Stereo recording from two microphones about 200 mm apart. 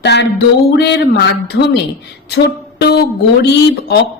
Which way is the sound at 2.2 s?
55° left (ahead or behind).